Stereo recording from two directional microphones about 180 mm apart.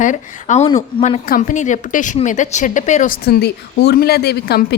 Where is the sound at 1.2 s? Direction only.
50° left (ahead or behind).